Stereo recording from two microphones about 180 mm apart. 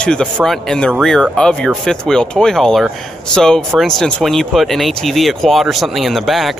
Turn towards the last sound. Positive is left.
turn(degrees=0)  # may be behind; listen again after turning